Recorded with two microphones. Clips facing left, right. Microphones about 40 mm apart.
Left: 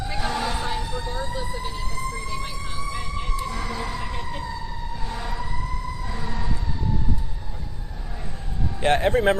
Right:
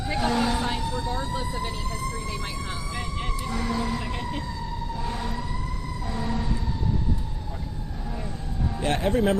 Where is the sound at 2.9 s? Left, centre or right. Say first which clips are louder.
Left 2 dB; centre.